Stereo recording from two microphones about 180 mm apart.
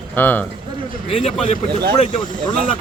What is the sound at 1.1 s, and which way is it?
Speech, 30° left (ahead or behind).